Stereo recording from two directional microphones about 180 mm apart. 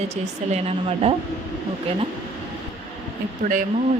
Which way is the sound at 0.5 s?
35° right (ahead or behind).